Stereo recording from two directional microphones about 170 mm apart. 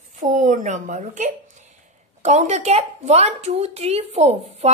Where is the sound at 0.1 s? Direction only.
50° right (ahead or behind).